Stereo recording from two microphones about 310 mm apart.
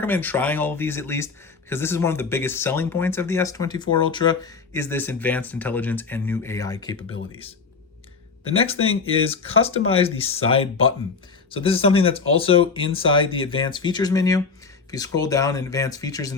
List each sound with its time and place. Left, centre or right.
0.0 s speech: centre
8.5 s speech: centre
8.8 s speech: left
9.6 s speech: centre